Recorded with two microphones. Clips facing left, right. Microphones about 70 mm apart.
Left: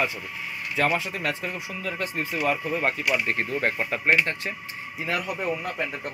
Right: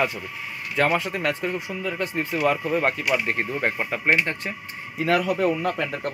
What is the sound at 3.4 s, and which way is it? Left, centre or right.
Speech, right.